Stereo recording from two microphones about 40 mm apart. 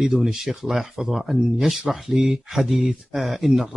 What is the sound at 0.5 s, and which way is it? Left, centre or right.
A man's voice, centre.